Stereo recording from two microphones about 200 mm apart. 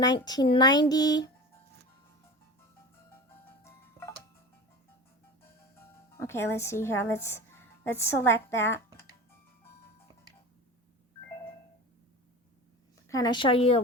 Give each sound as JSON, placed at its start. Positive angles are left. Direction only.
{"t": 0.3, "sound": "speech", "side_deg": 20}
{"t": 6.1, "sound": "a woman's voice", "side_deg": 10}
{"t": 13.1, "sound": "speech", "side_deg": 15}